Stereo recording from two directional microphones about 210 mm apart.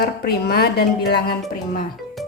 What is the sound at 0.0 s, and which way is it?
Speech, 50° left (ahead or behind).